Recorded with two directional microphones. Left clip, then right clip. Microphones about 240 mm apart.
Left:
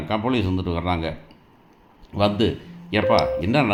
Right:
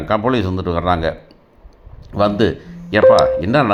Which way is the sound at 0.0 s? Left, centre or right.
Right.